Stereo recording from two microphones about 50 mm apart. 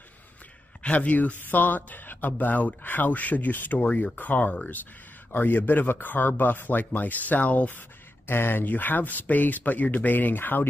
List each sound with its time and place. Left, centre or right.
0.8 s speech: left
8.3 s speech: left